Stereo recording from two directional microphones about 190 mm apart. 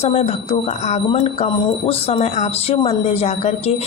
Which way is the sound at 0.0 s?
35° left (ahead or behind).